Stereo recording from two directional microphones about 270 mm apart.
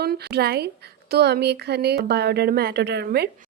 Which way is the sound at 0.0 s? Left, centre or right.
Right.